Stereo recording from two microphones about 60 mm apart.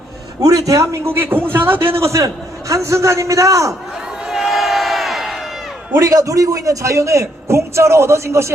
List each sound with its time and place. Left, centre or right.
0.3 s a man's voice: right
2.2 s a man's voice: right
4.3 s crowd: centre
6.0 s a man's voice: right